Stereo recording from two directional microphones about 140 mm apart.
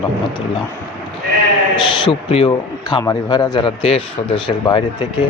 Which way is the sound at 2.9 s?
30° left (ahead or behind).